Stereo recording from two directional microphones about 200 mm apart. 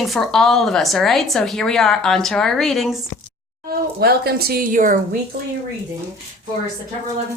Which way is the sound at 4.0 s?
50° right (ahead or behind).